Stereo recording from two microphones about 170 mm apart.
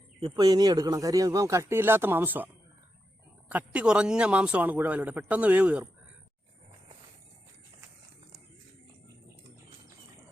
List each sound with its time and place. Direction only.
0.2 s speech: 30° right (ahead or behind); by 2.5 s 10° right (ahead or behind)
3.5 s speech: 10° right (ahead or behind)